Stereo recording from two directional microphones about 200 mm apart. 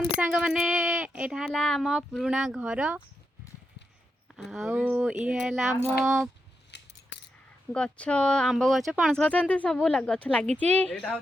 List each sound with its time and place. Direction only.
0.2 s speech: 5° right (ahead or behind)
4.4 s speech: centre (ahead or behind)
6.7 s scissors: 60° left (ahead or behind)
7.7 s speech: 5° left (ahead or behind)